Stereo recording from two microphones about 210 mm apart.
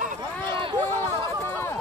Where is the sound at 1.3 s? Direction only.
10° left (ahead or behind).